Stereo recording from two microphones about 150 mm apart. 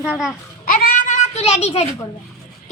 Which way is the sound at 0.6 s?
70° left (ahead or behind).